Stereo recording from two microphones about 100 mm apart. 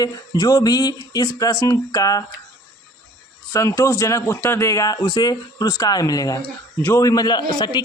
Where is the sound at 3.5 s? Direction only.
30° left (ahead or behind).